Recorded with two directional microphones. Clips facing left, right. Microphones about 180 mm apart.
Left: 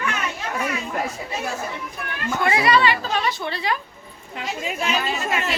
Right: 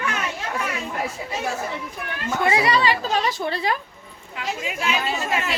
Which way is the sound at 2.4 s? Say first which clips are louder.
Left 1 dB; 25° right (ahead or behind).